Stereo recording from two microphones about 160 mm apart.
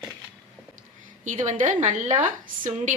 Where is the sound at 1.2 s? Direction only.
50° right (ahead or behind).